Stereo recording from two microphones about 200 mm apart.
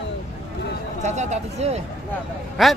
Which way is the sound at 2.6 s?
Centre (ahead or behind).